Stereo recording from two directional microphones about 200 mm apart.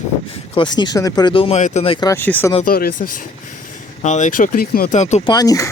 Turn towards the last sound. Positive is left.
turn(degrees=15)  # may be behind; listen again after turning